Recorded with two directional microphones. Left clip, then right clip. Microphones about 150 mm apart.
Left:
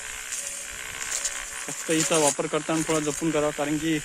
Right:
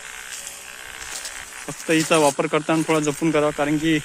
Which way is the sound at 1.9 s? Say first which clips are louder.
Right 5 dB; 5° right (ahead or behind).